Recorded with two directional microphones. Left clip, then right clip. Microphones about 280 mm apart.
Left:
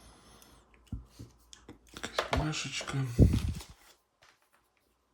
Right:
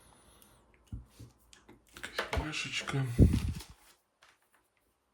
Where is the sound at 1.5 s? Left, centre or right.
Centre.